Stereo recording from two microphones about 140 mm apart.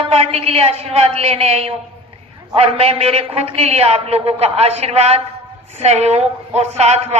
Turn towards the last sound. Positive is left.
turn(degrees=-50)  # may be behind; listen again after turning